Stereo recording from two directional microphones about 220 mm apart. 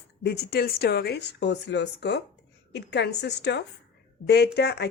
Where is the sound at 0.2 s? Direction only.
45° left (ahead or behind).